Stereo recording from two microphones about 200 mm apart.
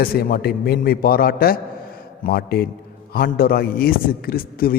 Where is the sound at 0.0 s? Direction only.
50° left (ahead or behind).